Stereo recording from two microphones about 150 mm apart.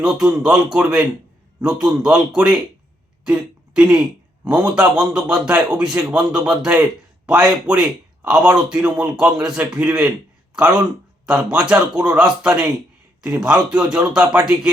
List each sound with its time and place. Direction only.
0.0 s speech: 5° right (ahead or behind)
11.3 s speech: 5° right (ahead or behind)